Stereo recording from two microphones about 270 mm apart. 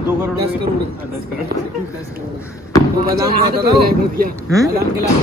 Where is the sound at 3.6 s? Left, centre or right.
Right.